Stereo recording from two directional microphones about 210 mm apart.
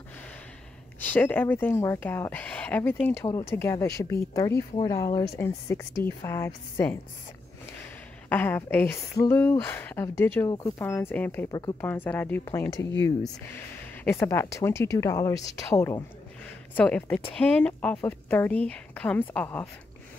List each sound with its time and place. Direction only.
1.0 s a woman's voice: 10° left (ahead or behind)
8.3 s a woman's voice: 10° left (ahead or behind)